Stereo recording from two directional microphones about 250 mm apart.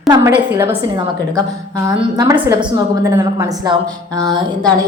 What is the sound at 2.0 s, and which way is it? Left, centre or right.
A woman's voice, centre.